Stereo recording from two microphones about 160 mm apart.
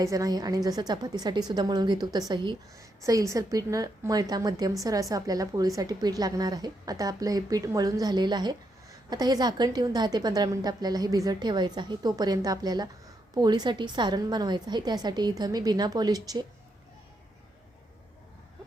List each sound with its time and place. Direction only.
0.0 s a woman's voice: 20° right (ahead or behind)